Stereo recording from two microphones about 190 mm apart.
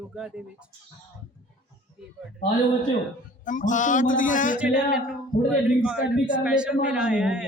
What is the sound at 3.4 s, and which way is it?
Speech, 45° left (ahead or behind).